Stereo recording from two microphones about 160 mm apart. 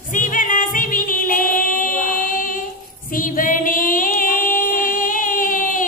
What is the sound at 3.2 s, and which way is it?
Singing, 60° left (ahead or behind).